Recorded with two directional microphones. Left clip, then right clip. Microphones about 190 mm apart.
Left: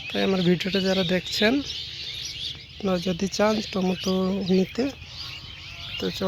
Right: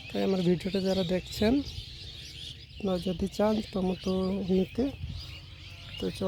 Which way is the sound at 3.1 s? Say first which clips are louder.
Left 6 dB; 10° right (ahead or behind).